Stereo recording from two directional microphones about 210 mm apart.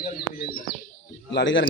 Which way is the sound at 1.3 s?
60° left (ahead or behind).